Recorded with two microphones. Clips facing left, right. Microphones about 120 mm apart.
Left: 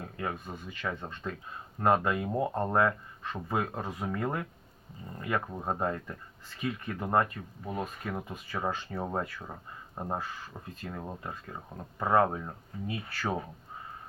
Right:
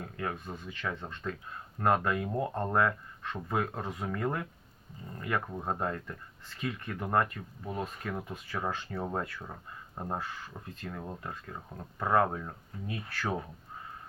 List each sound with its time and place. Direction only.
0.0 s speech: 15° left (ahead or behind)